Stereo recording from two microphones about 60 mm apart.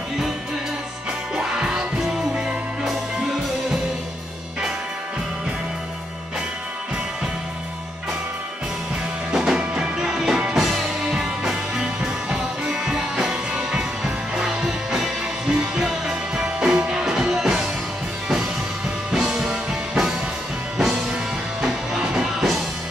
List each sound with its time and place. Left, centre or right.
1.3 s music: centre
9.3 s music: centre
9.6 s music: centre
10.0 s music: centre
19.1 s music: centre